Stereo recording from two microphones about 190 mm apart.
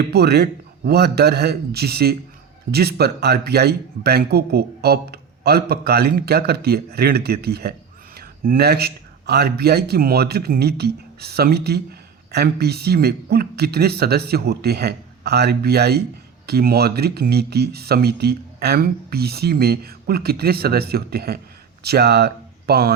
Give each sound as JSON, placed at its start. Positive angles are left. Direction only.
{"t": 0.0, "sound": "a man's voice", "side_deg": -55}